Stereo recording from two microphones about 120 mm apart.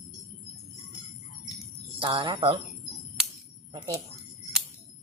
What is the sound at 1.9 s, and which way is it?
Speech, 45° right (ahead or behind).